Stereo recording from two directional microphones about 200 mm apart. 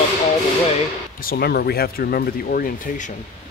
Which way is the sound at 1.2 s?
50° left (ahead or behind).